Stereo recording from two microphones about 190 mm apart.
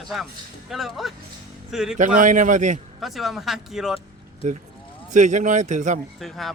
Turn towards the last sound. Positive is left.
turn(degrees=0)  # may be behind; listen again after turning